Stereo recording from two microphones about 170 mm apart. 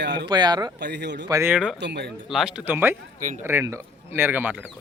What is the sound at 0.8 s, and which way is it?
Speech, 85° right.